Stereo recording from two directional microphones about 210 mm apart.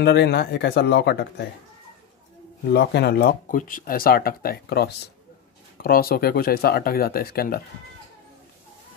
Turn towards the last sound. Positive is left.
turn(degrees=45)  # may be behind; listen again after turning